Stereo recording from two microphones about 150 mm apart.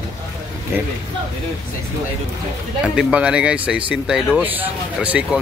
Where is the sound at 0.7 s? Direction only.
15° right (ahead or behind).